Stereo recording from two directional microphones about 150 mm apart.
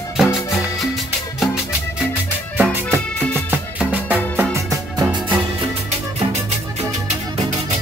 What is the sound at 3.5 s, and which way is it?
Music, 10° right (ahead or behind).